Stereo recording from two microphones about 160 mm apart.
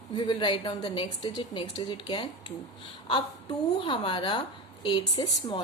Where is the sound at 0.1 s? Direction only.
30° left (ahead or behind).